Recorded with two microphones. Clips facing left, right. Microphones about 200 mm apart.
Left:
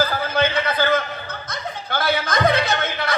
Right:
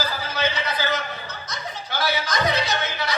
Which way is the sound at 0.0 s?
55° left (ahead or behind).